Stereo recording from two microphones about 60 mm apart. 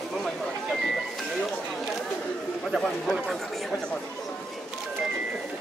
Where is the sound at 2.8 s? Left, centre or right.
Centre.